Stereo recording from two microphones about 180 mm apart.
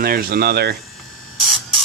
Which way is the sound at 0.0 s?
55° right (ahead or behind).